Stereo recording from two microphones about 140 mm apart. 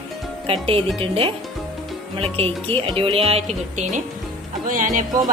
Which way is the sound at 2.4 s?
40° right (ahead or behind).